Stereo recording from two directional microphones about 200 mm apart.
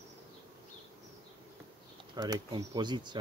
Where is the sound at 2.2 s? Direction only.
20° right (ahead or behind).